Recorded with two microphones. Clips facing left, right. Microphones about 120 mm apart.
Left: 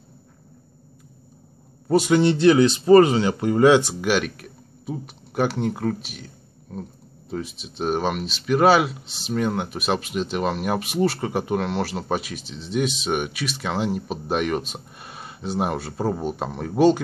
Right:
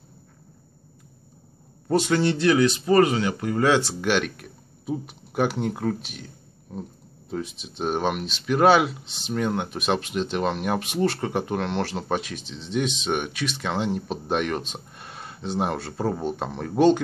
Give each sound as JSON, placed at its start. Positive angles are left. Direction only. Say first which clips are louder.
{"t": 1.9, "sound": "a man's voice", "louder": "left 4 dB", "side_deg": 10}
{"t": 2.2, "sound": "speech", "louder": "left 4 dB", "side_deg": 25}
{"t": 4.0, "sound": "speech", "louder": "left 1 dB", "side_deg": 5}